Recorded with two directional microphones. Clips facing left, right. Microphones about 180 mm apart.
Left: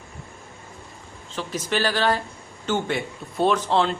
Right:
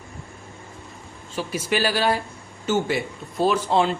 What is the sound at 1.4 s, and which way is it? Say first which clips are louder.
Speech: right 1 dB; 10° right (ahead or behind).